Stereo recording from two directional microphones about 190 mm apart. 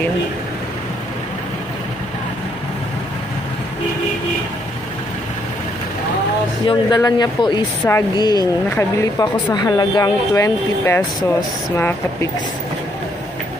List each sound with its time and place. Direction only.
6.6 s speech: 25° left (ahead or behind)